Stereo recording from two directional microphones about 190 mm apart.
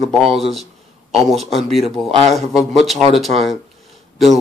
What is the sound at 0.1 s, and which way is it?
Speech, centre (ahead or behind).